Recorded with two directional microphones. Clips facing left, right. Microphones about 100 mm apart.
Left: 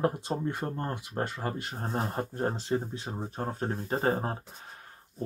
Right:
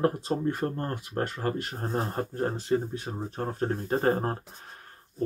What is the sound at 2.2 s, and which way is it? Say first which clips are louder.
Speech: right 1 dB; 20° left (ahead or behind).